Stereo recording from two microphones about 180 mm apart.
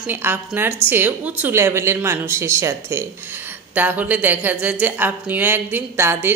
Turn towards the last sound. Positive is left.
turn(degrees=-10)  # may be behind; listen again after turning